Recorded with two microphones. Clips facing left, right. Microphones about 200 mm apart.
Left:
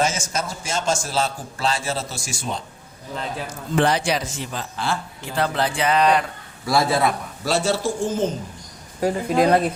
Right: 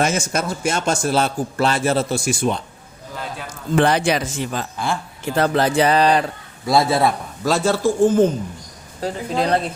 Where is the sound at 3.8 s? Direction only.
60° right (ahead or behind).